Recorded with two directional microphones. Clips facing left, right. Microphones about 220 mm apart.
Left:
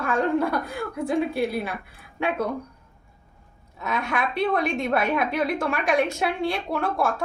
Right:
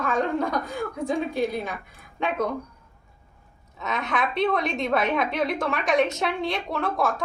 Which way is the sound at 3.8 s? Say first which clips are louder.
Even; 10° left (ahead or behind).